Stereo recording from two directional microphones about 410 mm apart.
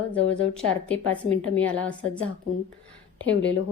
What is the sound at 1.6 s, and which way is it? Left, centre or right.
Speech, centre.